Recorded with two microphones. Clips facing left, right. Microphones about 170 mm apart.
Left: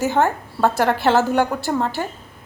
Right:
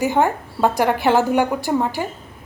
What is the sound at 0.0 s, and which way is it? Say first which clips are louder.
Speech: right 1 dB; 15° right (ahead or behind).